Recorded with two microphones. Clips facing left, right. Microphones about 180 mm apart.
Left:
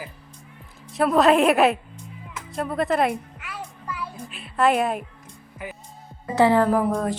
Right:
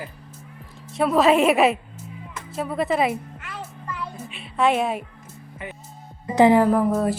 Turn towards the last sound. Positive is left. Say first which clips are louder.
# right 2 dB
turn(degrees=-5)  # may be behind; listen again after turning